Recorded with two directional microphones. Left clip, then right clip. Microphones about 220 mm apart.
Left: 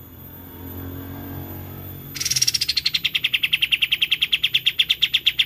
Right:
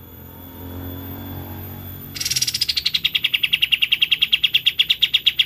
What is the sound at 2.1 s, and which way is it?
Bird, 10° left (ahead or behind).